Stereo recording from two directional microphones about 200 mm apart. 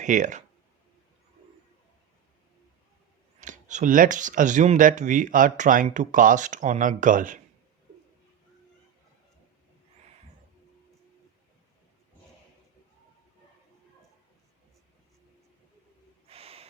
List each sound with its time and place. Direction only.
0.0 s speech: 40° right (ahead or behind)
3.4 s speech: 40° right (ahead or behind)
16.3 s gasp: 30° right (ahead or behind)